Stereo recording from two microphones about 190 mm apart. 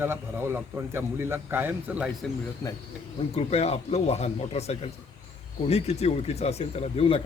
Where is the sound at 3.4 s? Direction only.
35° left (ahead or behind).